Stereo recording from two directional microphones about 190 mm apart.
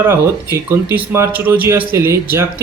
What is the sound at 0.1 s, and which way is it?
Speech, 10° right (ahead or behind).